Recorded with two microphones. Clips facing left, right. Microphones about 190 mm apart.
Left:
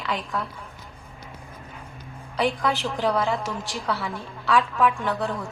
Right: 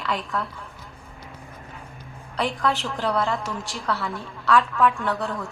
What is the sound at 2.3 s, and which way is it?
A woman's voice, centre (ahead or behind).